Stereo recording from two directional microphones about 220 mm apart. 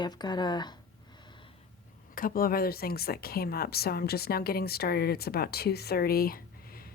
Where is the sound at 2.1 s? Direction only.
40° left (ahead or behind).